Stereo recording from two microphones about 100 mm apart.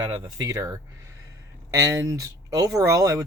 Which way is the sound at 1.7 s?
30° right (ahead or behind).